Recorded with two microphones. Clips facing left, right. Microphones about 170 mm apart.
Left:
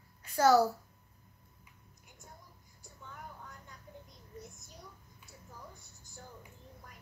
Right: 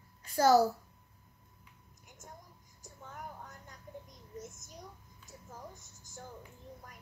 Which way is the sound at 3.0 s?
45° right (ahead or behind).